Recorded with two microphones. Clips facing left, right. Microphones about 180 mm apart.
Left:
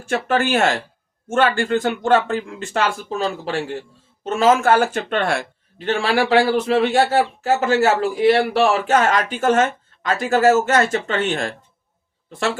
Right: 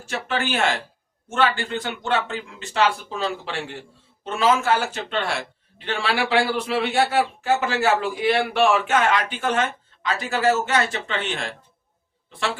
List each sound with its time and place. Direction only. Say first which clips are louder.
0.0 s a man's voice: left 7 dB; 50° left (ahead or behind)